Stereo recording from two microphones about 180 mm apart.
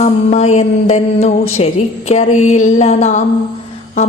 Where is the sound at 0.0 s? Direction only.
40° left (ahead or behind).